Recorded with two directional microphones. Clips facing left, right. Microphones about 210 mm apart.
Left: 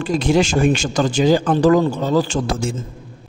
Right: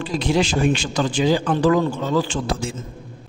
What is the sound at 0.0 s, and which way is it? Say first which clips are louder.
A man's voice: left 4 dB; 45° left (ahead or behind).